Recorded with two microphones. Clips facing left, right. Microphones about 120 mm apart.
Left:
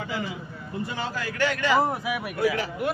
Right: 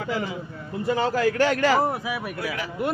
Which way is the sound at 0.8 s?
45° right (ahead or behind).